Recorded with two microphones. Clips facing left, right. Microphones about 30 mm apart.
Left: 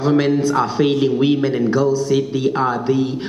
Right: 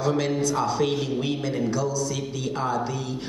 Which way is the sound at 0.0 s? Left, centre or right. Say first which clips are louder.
Left 8 dB; left.